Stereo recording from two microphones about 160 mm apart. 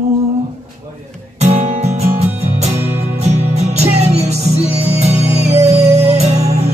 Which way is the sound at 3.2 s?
45° right (ahead or behind).